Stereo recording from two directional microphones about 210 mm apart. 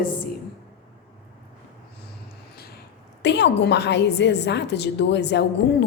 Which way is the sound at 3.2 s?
55° left (ahead or behind).